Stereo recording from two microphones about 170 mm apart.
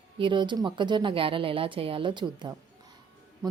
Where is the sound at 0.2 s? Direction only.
30° right (ahead or behind).